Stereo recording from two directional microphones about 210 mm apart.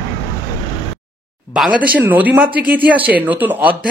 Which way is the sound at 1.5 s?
5° right (ahead or behind).